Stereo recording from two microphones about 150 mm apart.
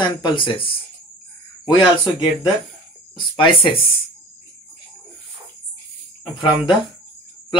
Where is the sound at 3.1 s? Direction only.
35° left (ahead or behind).